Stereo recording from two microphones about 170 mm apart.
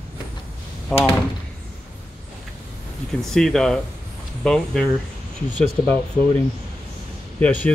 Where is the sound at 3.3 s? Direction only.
5° left (ahead or behind).